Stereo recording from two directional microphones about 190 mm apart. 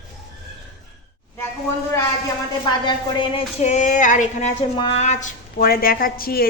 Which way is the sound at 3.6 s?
40° left (ahead or behind).